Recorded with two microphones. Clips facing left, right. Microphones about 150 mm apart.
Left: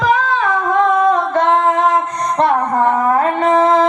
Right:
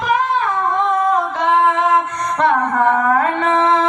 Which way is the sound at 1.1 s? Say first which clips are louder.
Left 3 dB; 50° left (ahead or behind).